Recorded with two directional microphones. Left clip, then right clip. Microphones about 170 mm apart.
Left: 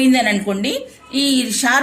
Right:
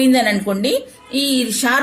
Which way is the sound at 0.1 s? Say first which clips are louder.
Even; 40° right (ahead or behind).